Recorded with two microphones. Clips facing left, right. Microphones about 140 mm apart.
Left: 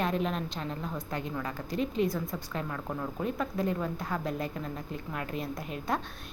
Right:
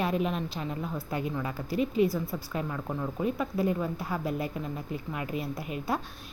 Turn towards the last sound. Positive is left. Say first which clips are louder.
# right 1 dB
turn(degrees=-5)  # may be behind; listen again after turning